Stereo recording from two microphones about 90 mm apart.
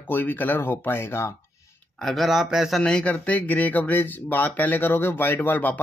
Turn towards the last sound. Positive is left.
turn(degrees=20)  # may be behind; listen again after turning